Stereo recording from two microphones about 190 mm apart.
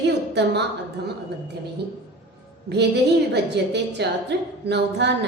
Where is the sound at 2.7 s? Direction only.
60° right (ahead or behind).